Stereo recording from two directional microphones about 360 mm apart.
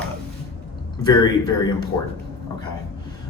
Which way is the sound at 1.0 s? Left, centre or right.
Centre.